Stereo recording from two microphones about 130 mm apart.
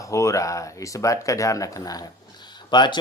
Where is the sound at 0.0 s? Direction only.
25° left (ahead or behind).